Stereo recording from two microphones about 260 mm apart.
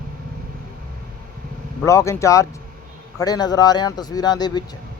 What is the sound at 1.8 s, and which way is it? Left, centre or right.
A man's voice, centre.